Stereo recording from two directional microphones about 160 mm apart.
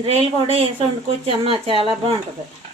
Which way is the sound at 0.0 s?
35° right (ahead or behind).